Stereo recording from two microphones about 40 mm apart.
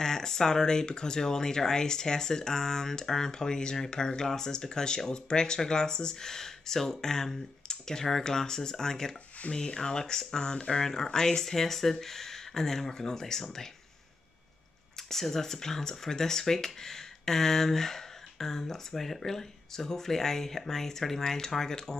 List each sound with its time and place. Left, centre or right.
0.0 s speech: centre
15.0 s speech: centre